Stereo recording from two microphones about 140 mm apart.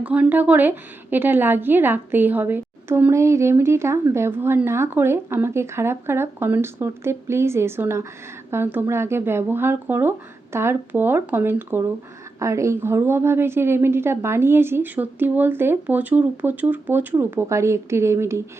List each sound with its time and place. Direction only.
0.0 s a woman's voice: 10° right (ahead or behind)